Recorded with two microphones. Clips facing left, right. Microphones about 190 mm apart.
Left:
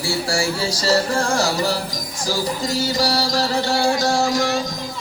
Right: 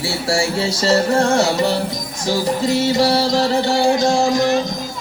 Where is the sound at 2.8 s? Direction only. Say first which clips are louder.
Right 4 dB; 25° right (ahead or behind).